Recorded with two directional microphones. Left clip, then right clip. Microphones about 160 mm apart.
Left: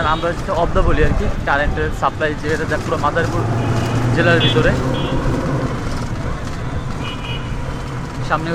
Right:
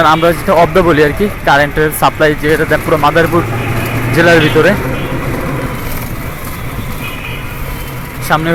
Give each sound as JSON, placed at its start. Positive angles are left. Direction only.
{"t": 0.0, "sound": "speech", "side_deg": -30}
{"t": 8.3, "sound": "speech", "side_deg": -30}